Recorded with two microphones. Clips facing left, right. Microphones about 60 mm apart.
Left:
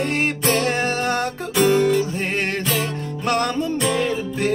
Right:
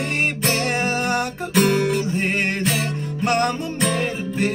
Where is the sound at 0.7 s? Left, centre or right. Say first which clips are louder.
Even; centre.